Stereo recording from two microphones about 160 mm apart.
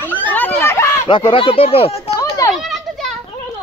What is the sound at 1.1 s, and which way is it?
Speech, 30° left (ahead or behind).